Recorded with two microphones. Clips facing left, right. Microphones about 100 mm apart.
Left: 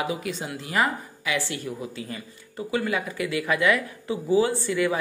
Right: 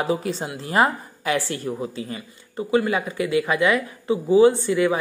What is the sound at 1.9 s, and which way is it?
Speech, 25° right (ahead or behind).